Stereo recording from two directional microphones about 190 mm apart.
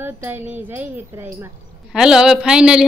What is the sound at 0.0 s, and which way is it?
A man's voice, 10° right (ahead or behind).